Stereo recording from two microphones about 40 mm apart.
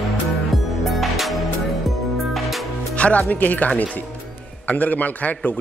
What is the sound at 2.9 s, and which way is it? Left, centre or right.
A man's voice, left.